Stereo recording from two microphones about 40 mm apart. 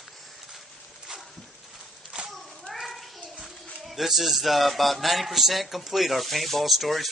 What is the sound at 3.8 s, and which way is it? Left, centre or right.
A man's voice, centre.